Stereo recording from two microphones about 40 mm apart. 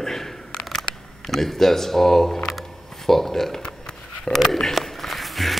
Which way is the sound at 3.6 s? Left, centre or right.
Left.